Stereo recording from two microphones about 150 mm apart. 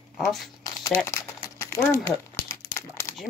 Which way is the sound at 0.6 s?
20° left (ahead or behind).